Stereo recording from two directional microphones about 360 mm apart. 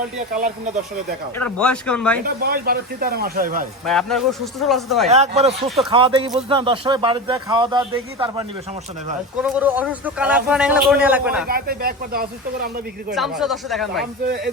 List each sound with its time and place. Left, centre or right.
0.3 s speech: centre
1.4 s a man's voice: centre
2.2 s speech: right
3.8 s a man's voice: centre
5.0 s a man's voice: centre
5.6 s a man's voice: centre
5.9 s a man's voice: centre
11.4 s speech: right
13.1 s a man's voice: centre
14.0 s speech: right